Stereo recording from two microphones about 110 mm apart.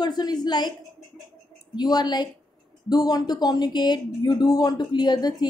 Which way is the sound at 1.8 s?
40° left (ahead or behind).